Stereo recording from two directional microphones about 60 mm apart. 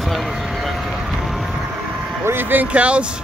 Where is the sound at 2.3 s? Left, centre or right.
Right.